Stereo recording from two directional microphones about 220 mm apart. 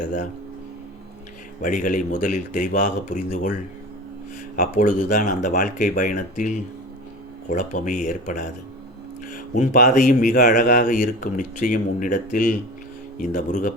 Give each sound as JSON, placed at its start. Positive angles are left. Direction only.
{"t": 1.6, "sound": "speech", "side_deg": 35}
{"t": 4.5, "sound": "speech", "side_deg": 35}